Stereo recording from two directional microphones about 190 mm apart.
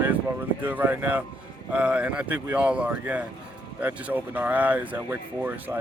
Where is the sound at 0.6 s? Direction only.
10° right (ahead or behind).